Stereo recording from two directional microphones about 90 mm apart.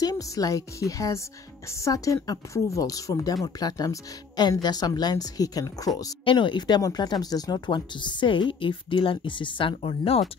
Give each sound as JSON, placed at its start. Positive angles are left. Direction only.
{"t": 0.0, "sound": "a woman's voice", "side_deg": 45}
{"t": 6.2, "sound": "speech", "side_deg": 60}